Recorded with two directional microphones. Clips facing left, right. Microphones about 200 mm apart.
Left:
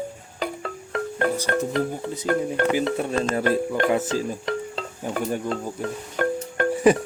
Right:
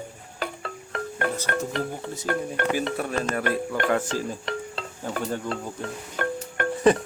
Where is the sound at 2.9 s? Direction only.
25° left (ahead or behind).